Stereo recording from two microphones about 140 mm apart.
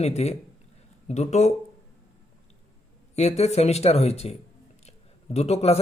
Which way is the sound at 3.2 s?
50° left (ahead or behind).